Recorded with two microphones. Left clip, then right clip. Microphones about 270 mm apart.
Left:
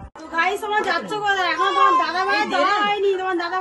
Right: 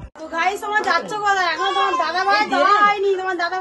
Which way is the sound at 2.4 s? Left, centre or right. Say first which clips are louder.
Right 3 dB; right.